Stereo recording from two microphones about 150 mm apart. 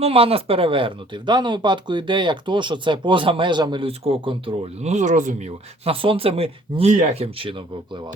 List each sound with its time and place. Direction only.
0.0 s speech: 40° right (ahead or behind); by 5.4 s 55° right (ahead or behind)
5.8 s speech: 40° right (ahead or behind)